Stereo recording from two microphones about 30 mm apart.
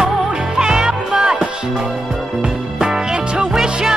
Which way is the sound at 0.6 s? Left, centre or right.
Centre.